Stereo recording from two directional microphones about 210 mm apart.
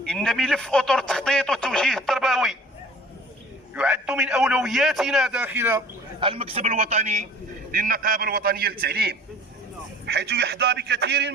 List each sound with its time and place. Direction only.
0.0 s a man's voice: 5° left (ahead or behind)
3.8 s a man's voice: 5° right (ahead or behind)
6.1 s a man's voice: 25° right (ahead or behind); by 11.3 s 55° right (ahead or behind)